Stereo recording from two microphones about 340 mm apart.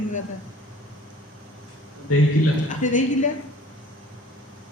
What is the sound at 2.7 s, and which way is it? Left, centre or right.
Speech, left.